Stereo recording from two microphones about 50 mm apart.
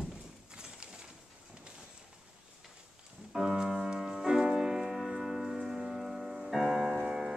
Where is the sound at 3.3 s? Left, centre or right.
Centre.